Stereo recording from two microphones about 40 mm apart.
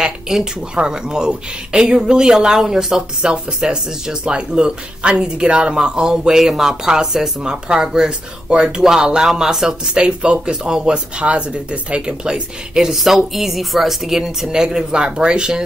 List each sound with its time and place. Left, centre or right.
0.3 s speech: centre
12.9 s speech: centre; by 15.6 s right